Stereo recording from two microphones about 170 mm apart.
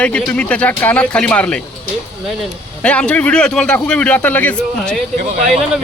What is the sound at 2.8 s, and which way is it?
Speech, 5° left (ahead or behind).